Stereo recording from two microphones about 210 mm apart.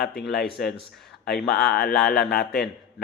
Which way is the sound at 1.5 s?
50° left (ahead or behind).